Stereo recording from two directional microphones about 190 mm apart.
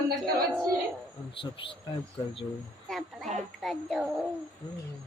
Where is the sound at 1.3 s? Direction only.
30° left (ahead or behind).